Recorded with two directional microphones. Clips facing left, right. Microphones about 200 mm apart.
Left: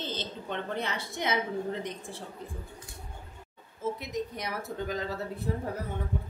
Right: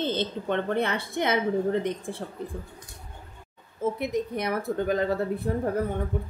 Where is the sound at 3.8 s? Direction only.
55° right (ahead or behind).